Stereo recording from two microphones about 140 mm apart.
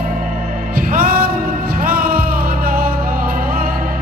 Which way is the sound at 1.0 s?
90° right.